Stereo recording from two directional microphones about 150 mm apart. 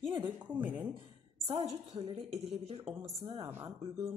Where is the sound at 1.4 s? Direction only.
40° right (ahead or behind).